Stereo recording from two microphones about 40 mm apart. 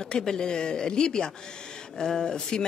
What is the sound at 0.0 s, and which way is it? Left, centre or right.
Speech, centre.